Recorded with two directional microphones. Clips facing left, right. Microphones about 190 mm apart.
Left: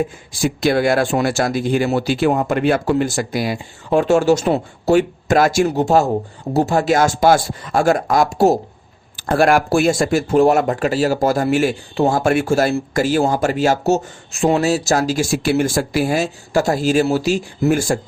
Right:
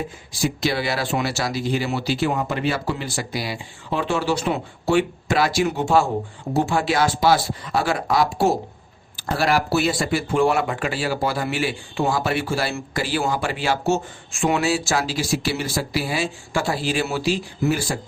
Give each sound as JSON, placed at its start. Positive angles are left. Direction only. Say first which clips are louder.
{"t": 0.4, "sound": "speech", "louder": "left 7 dB", "side_deg": 50}